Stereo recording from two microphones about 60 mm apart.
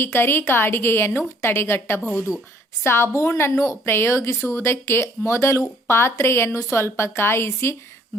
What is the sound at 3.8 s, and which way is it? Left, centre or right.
Speech, left.